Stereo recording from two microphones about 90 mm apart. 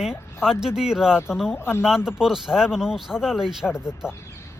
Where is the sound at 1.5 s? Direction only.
25° left (ahead or behind).